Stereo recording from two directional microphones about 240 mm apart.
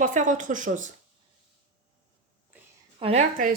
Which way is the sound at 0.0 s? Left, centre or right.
Right.